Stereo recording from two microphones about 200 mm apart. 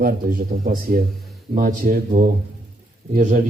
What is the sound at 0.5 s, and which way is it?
Speech, 30° right (ahead or behind).